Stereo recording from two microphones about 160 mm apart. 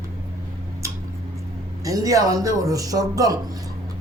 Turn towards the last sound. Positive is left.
turn(degrees=-20)  # may be behind; listen again after turning